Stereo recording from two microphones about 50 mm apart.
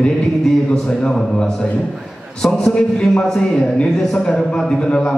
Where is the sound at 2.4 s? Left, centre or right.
Centre.